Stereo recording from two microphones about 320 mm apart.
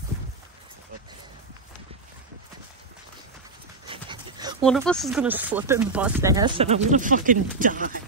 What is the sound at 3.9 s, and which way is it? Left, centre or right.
Dog, centre.